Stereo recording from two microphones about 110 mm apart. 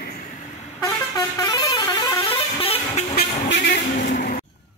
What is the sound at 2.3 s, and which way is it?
Guitar, 60° left (ahead or behind).